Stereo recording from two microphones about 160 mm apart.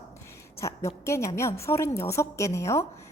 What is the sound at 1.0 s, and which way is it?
A woman's voice, 20° left (ahead or behind).